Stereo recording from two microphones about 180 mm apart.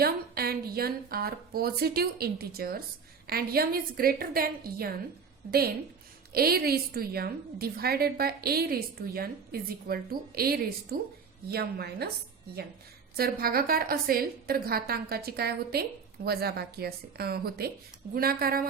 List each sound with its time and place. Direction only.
0.0 s a woman's voice: 60° right (ahead or behind)
13.1 s a woman's voice: 55° right (ahead or behind)